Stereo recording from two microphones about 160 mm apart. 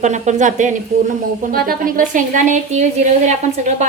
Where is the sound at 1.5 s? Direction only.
70° right (ahead or behind).